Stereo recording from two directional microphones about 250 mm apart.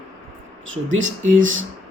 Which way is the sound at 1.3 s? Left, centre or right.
Right.